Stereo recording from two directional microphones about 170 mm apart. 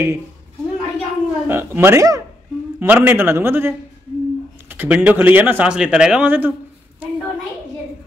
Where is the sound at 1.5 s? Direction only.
10° right (ahead or behind).